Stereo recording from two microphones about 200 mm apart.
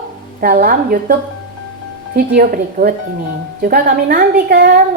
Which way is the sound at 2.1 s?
50° right (ahead or behind).